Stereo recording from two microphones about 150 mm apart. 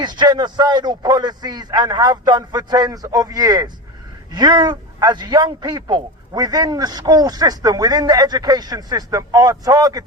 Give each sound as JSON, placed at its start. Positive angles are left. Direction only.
{"t": 0.0, "sound": "a man's voice", "side_deg": -30}